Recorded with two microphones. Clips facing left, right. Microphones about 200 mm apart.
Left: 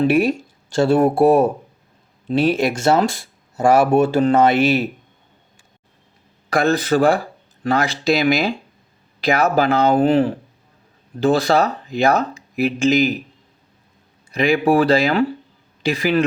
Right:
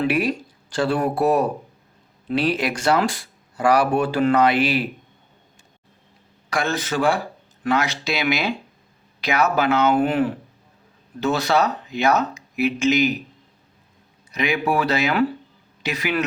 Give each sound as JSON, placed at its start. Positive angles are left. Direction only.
{"t": 0.3, "sound": "speech", "side_deg": 25}
{"t": 2.6, "sound": "speech", "side_deg": 25}
{"t": 6.5, "sound": "speech", "side_deg": 35}
{"t": 14.3, "sound": "speech", "side_deg": 30}